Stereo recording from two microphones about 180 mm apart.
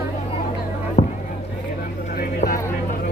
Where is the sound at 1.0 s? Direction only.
45° left (ahead or behind).